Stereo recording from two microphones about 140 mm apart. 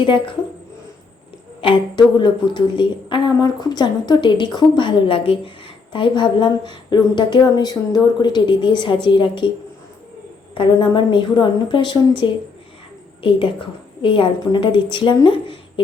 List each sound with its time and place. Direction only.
1.6 s a woman's voice: 35° left (ahead or behind)
10.5 s a woman's voice: 35° left (ahead or behind)